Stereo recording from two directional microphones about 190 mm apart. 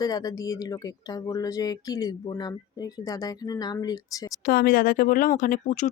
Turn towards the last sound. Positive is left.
turn(degrees=45)  # may be behind; listen again after turning